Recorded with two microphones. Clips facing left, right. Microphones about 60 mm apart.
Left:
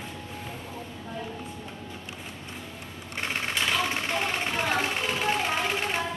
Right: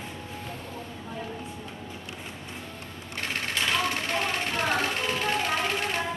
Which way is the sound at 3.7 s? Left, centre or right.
Centre.